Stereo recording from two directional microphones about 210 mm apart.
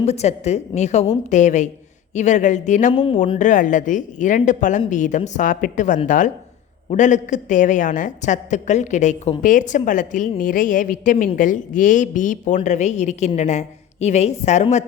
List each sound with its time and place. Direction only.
0.0 s a woman's voice: 30° left (ahead or behind)
3.0 s speech: 25° left (ahead or behind)
3.3 s a woman's voice: 40° left (ahead or behind)